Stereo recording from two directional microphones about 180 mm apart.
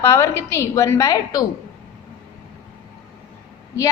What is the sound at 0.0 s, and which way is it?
A woman's voice, 15° left (ahead or behind).